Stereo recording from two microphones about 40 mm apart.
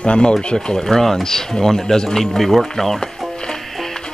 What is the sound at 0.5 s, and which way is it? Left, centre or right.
Speech, centre.